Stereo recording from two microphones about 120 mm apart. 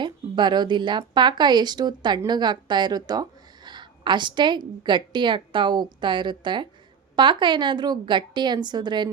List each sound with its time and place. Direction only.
0.0 s speech: 40° right (ahead or behind)